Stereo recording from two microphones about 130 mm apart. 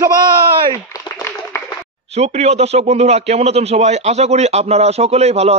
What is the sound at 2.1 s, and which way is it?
A man's voice, 55° right (ahead or behind).